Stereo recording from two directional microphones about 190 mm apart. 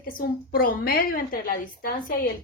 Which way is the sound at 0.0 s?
50° left (ahead or behind).